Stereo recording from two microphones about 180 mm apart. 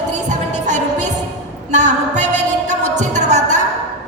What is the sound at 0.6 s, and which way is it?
Music, 40° right (ahead or behind).